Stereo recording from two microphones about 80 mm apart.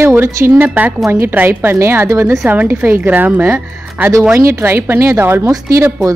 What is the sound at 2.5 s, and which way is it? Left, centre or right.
A woman's voice, right.